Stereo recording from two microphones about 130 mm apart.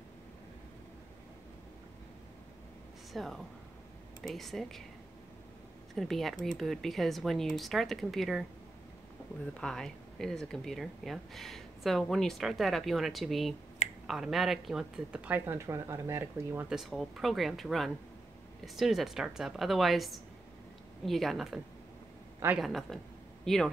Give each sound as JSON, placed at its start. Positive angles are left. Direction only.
{"t": 3.1, "sound": "speech", "side_deg": 0}
{"t": 5.9, "sound": "speech", "side_deg": 0}
{"t": 9.5, "sound": "speech", "side_deg": 5}
{"t": 16.6, "sound": "speech", "side_deg": 0}
{"t": 22.6, "sound": "speech", "side_deg": 0}